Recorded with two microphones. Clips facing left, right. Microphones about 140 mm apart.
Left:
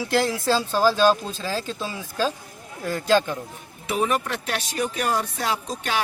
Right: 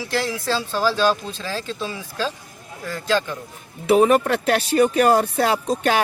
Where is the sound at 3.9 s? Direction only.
40° right (ahead or behind).